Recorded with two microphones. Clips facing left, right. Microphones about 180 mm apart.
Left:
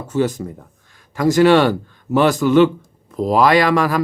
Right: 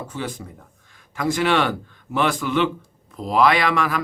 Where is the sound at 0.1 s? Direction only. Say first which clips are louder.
Left 11 dB; 45° left (ahead or behind).